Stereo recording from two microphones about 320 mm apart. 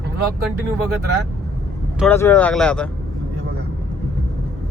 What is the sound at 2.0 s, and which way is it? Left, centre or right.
Speech, centre.